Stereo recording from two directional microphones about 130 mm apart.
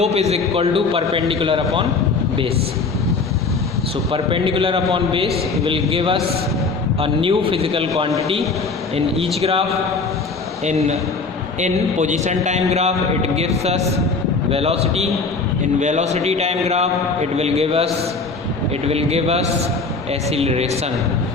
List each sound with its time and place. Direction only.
0.0 s a man's voice: 55° right (ahead or behind)
4.1 s a man's voice: 45° right (ahead or behind)
10.7 s a man's voice: 60° right (ahead or behind)
18.9 s a man's voice: 50° right (ahead or behind)